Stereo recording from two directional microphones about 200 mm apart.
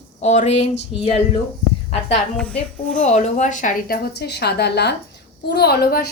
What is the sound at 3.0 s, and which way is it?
A woman's voice, 35° left (ahead or behind).